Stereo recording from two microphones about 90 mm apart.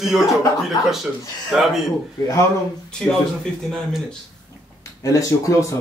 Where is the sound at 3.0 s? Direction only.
5° left (ahead or behind).